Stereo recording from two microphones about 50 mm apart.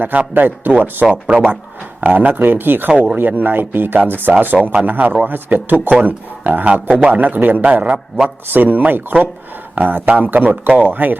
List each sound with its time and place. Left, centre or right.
0.0 s speech: right
1.3 s speech: right
2.9 s speech: right
3.2 s speech: right
7.9 s a man's voice: centre
8.4 s speech: right